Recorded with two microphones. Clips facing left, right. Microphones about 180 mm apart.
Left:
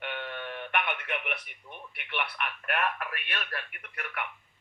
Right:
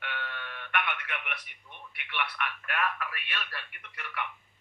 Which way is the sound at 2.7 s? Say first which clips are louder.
Left 1 dB; 50° left (ahead or behind).